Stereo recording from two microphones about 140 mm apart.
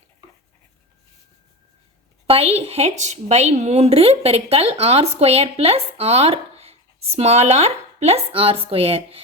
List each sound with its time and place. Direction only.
2.2 s a woman's voice: 45° right (ahead or behind)